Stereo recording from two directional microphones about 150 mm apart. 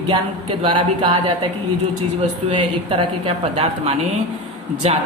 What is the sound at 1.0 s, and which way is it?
Speech, 30° right (ahead or behind).